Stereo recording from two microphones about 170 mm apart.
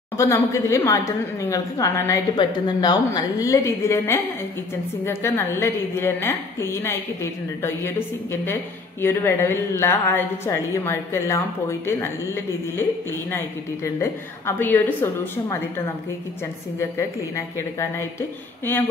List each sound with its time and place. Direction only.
0.2 s a woman's voice: 15° left (ahead or behind)
14.4 s a woman's voice: 10° left (ahead or behind)